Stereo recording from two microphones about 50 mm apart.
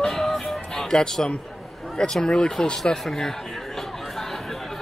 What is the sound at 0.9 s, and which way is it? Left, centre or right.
Speech, centre.